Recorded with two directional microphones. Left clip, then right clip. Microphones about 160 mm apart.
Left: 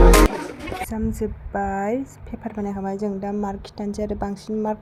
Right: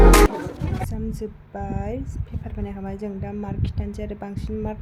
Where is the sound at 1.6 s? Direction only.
20° left (ahead or behind).